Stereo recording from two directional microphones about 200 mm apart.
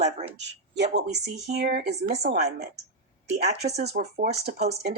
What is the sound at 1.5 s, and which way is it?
Speech, 50° right (ahead or behind).